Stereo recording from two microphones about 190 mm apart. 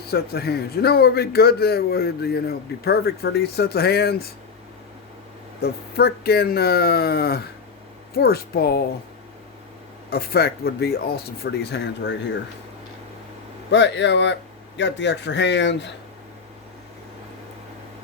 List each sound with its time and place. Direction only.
0.1 s a man's voice: 55° left (ahead or behind)
5.6 s a man's voice: 55° left (ahead or behind)
10.1 s a man's voice: 55° left (ahead or behind)
11.7 s speech: 65° left (ahead or behind)
13.7 s speech: 70° left (ahead or behind)